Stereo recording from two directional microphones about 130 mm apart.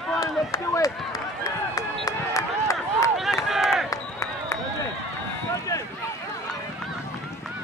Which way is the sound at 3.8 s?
20° left (ahead or behind).